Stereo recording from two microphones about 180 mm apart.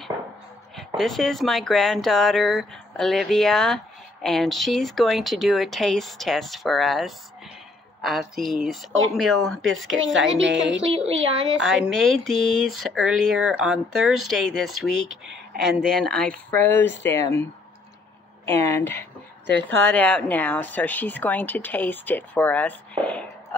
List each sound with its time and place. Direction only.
0.7 s speech: centre (ahead or behind)
9.9 s a woman's voice: 90° right
10.8 s speech: 35° right (ahead or behind)
11.6 s speech: centre (ahead or behind)
15.0 s speech: 80° right
15.9 s speech: 5° left (ahead or behind)
18.7 s speech: 10° left (ahead or behind)